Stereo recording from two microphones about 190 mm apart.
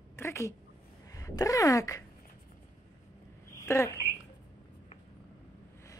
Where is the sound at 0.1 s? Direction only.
15° left (ahead or behind).